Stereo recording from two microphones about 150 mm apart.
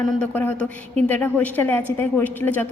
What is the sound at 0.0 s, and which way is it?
A woman's voice, 10° left (ahead or behind).